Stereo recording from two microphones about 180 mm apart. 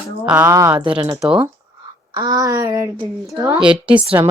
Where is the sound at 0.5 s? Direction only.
20° right (ahead or behind).